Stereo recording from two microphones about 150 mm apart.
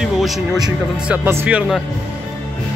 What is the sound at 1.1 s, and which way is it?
Speech, 10° right (ahead or behind).